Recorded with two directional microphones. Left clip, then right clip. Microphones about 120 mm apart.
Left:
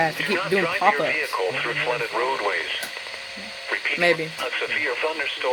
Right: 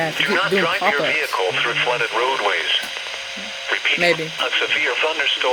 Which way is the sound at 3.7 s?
30° right (ahead or behind).